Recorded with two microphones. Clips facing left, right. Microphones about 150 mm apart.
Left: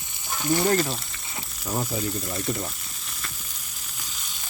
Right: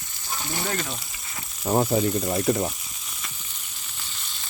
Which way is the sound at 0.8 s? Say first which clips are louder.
Left 4 dB; centre (ahead or behind).